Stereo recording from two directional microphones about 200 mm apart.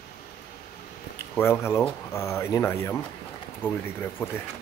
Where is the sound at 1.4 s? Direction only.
10° left (ahead or behind).